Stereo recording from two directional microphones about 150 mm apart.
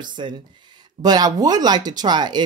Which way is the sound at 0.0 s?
30° right (ahead or behind).